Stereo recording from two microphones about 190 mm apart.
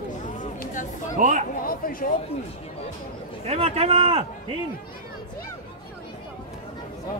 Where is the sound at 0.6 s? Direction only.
40° left (ahead or behind).